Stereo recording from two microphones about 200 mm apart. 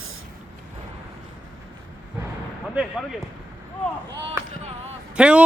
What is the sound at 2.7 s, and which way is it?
Speech, centre (ahead or behind).